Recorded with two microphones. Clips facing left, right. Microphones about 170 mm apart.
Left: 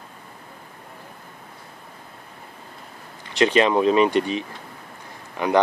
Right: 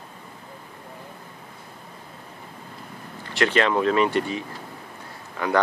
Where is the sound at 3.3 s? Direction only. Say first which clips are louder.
Left 3 dB; 15° left (ahead or behind).